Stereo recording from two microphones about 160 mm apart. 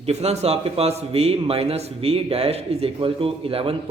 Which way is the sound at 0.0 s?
40° right (ahead or behind).